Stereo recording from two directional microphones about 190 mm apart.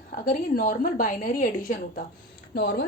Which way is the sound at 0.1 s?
45° left (ahead or behind).